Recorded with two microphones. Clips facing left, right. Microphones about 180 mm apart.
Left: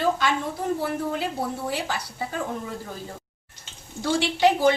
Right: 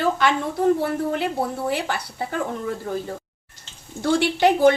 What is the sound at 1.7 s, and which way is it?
Speech, 60° right (ahead or behind).